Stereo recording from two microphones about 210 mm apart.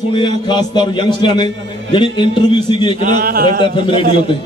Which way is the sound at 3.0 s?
45° right (ahead or behind).